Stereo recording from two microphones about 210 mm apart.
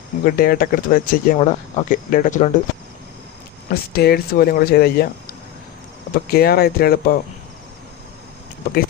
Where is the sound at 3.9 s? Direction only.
45° left (ahead or behind).